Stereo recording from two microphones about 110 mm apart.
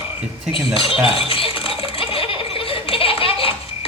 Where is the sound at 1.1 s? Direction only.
60° left (ahead or behind).